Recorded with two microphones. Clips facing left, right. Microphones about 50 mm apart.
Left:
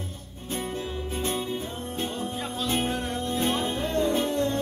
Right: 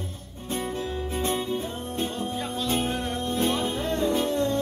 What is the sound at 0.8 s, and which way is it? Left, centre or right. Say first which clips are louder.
Music: right 2 dB; right.